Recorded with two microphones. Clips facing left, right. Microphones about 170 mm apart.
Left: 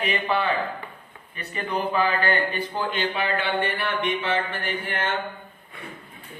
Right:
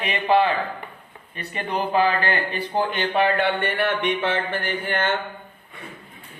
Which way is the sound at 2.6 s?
60° right (ahead or behind).